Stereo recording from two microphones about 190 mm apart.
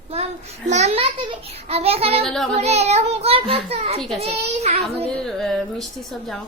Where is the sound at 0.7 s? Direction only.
35° right (ahead or behind).